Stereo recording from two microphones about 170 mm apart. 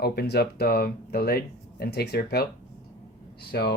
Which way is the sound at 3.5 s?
70° left (ahead or behind).